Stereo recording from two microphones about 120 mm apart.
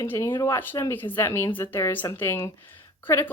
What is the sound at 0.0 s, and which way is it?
A woman's voice, 20° left (ahead or behind).